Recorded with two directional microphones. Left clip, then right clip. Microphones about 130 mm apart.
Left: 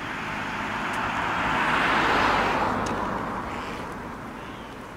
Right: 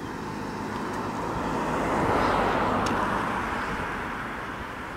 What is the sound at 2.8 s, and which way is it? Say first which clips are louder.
Vehicle: right 2 dB; 15° right (ahead or behind).